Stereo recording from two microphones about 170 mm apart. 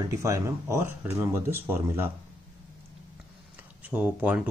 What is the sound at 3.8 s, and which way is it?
Speech, 10° right (ahead or behind).